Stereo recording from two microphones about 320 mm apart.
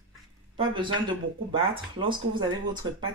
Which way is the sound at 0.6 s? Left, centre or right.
Centre.